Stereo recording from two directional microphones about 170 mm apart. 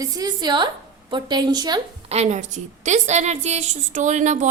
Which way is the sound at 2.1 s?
40° right (ahead or behind).